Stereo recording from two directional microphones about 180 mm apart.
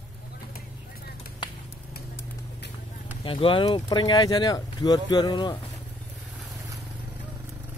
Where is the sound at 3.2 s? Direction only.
30° left (ahead or behind).